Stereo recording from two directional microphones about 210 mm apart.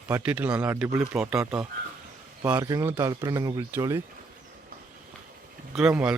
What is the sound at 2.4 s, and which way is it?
Speech, 15° right (ahead or behind).